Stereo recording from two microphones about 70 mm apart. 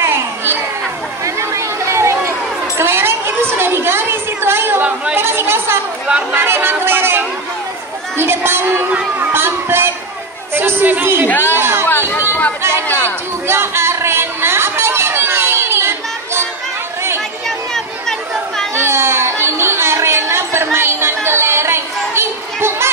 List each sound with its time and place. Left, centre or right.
0.0 s children playing: right
1.2 s a sound: right
5.1 s chatter: right
8.5 s a sound: right
11.2 s speech: left
11.5 s chatter: right
12.1 s chatter: left
13.5 s chatter: right
18.8 s chatter: right